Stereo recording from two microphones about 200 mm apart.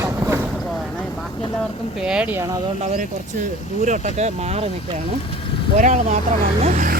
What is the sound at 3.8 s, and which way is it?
Speech, 35° right (ahead or behind).